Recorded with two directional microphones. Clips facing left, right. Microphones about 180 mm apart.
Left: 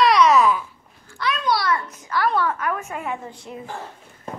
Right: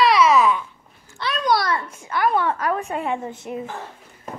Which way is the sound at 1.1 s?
35° right (ahead or behind).